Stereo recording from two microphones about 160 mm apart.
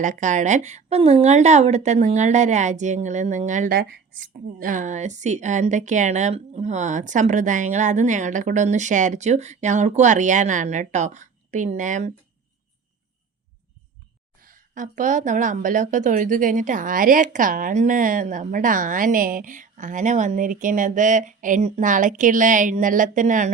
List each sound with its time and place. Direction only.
0.0 s a woman's voice: 50° right (ahead or behind)
14.4 s a woman's voice: 55° right (ahead or behind)